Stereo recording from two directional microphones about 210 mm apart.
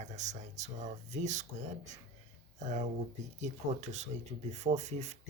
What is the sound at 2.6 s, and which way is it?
Speech, 35° right (ahead or behind).